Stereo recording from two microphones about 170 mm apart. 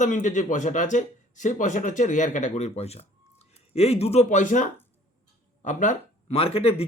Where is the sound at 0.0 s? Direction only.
50° left (ahead or behind).